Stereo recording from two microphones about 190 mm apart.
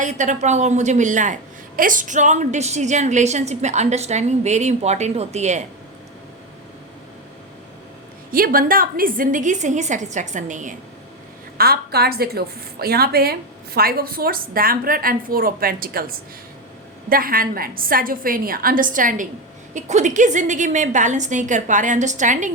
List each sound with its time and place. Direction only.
0.0 s a woman's voice: 40° right (ahead or behind)
8.3 s a woman's voice: 50° right (ahead or behind)
11.5 s a woman's voice: 55° right (ahead or behind)